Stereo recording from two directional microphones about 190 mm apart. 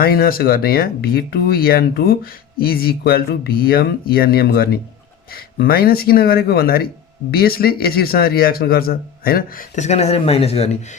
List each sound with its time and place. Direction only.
0.0 s speech: 50° left (ahead or behind); by 10.9 s 35° left (ahead or behind)